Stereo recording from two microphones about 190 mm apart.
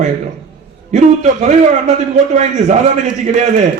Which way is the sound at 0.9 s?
40° right (ahead or behind).